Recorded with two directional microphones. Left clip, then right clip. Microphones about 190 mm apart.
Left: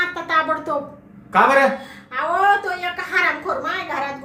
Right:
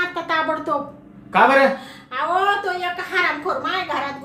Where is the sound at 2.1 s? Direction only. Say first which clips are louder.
Left 2 dB; centre (ahead or behind).